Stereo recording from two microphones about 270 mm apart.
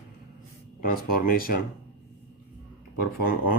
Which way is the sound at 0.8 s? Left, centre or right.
Left.